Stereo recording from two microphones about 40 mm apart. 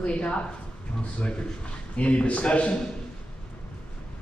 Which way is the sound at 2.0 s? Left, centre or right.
Left.